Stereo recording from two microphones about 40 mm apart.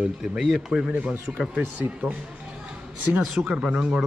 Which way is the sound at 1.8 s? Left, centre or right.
Right.